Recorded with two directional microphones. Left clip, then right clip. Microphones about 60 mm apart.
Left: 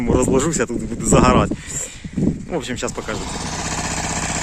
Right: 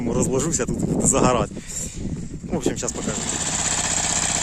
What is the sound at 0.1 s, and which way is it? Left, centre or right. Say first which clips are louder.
Speech: left 6 dB; right.